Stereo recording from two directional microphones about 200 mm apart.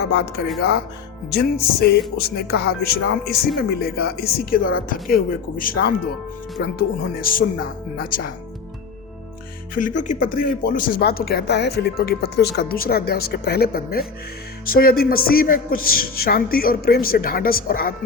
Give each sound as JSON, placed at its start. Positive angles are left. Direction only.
{"t": 0.0, "sound": "speech", "side_deg": 55}
{"t": 9.7, "sound": "speech", "side_deg": 40}